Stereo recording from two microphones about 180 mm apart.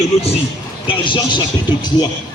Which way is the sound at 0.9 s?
25° left (ahead or behind).